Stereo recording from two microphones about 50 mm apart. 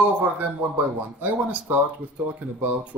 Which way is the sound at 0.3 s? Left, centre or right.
Right.